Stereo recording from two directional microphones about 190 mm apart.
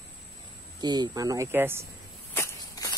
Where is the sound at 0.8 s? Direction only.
20° right (ahead or behind).